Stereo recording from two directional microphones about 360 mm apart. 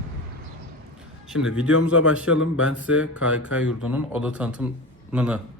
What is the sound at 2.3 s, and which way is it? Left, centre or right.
Speech, left.